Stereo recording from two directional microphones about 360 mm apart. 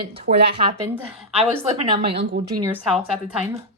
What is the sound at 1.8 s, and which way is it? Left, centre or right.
A woman's voice, centre.